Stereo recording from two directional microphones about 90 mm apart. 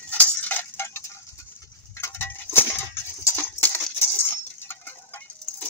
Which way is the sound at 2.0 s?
30° left (ahead or behind).